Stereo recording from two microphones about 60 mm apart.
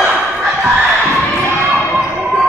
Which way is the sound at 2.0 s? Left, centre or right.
Centre.